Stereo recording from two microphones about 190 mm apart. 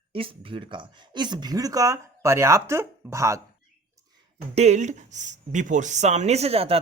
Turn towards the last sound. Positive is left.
turn(degrees=-30)  # may be behind; listen again after turning